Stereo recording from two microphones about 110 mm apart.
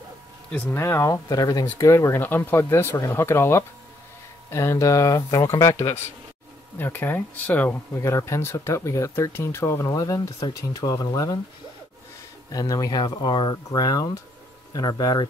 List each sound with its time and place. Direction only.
0.5 s speech: 20° left (ahead or behind)
5.8 s speech: 20° left (ahead or behind)
7.9 s speech: 25° left (ahead or behind)
12.4 s speech: 30° left (ahead or behind)